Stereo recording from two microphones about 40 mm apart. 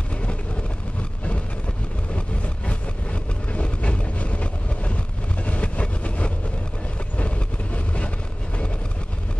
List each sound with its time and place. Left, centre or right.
2.1 s vehicle: left